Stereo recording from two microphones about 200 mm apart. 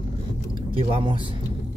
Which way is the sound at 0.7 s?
25° right (ahead or behind).